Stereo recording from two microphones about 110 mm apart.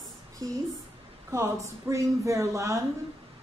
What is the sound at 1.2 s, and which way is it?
Speech, 25° right (ahead or behind).